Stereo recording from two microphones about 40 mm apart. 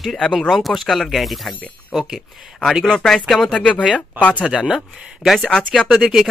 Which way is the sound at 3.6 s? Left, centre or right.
Left.